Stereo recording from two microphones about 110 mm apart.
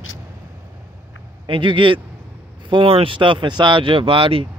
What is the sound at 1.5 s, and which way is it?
Speech, 50° right (ahead or behind).